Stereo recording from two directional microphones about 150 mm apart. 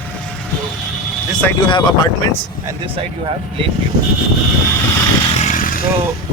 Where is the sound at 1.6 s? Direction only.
30° left (ahead or behind).